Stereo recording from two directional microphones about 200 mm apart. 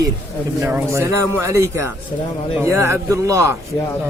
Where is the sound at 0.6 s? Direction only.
10° right (ahead or behind).